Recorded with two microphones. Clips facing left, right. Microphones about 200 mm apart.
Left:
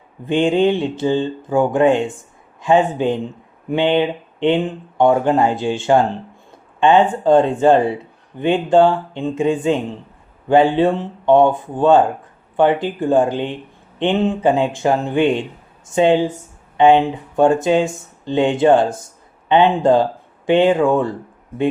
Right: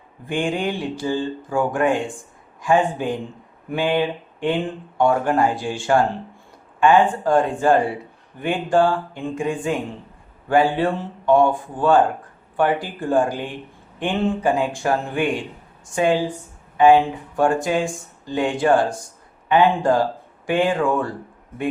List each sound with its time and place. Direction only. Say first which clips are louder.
0.3 s speech: left 8 dB; 20° left (ahead or behind)